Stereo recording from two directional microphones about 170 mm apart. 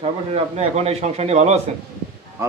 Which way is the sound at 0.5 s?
40° right (ahead or behind).